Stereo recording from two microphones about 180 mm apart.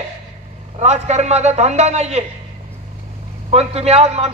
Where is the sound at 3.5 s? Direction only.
35° right (ahead or behind).